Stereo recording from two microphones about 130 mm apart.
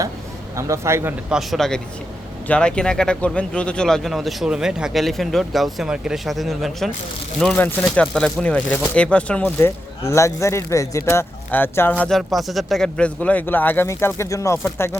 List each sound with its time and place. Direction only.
0.5 s a man's voice: 20° right (ahead or behind)
1.3 s speech: centre (ahead or behind); by 14.9 s 20° left (ahead or behind)